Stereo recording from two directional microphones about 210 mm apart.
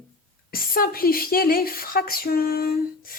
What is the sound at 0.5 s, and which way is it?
Speech, 45° left (ahead or behind).